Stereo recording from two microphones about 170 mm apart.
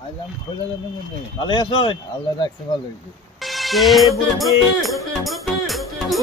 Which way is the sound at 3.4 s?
Centre (ahead or behind).